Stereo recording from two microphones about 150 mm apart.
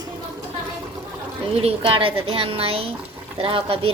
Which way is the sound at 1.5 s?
40° right (ahead or behind).